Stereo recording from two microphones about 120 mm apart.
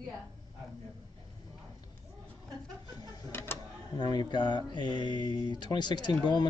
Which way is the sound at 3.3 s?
20° left (ahead or behind).